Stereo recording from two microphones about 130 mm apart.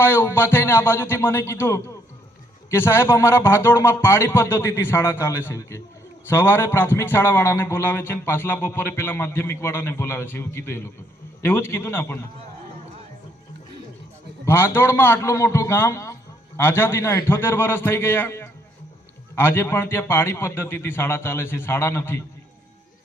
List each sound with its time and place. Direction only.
0.0 s speech: 20° left (ahead or behind)
14.4 s speech: 20° left (ahead or behind)